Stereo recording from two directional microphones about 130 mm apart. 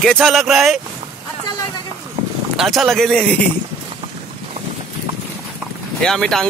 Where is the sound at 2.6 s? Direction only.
Centre (ahead or behind).